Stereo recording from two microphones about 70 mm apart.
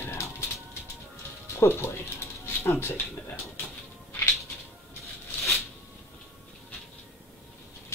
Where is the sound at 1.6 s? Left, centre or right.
Left.